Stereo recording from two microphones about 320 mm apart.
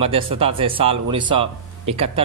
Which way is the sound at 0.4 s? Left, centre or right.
Centre.